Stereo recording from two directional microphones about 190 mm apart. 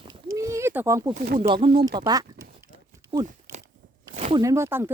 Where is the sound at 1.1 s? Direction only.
50° right (ahead or behind).